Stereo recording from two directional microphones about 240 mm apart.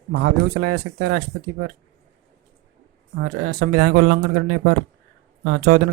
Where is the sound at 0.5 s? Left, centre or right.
Right.